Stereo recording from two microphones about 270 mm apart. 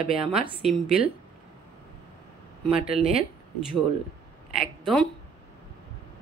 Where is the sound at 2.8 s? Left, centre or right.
Centre.